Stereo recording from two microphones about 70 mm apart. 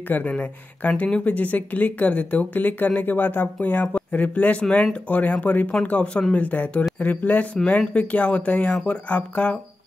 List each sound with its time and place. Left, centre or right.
0.1 s speech: left